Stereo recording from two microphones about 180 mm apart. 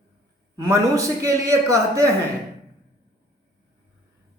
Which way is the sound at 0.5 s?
20° right (ahead or behind).